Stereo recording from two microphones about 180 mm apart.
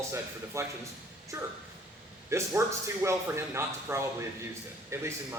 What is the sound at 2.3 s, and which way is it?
A man's voice, 15° right (ahead or behind).